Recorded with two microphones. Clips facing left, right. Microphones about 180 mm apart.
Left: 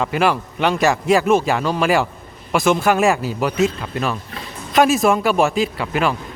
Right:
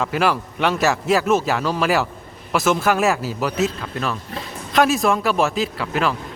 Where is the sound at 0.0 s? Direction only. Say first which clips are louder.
Left 2 dB; centre (ahead or behind).